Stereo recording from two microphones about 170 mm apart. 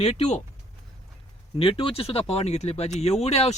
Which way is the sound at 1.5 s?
30° left (ahead or behind).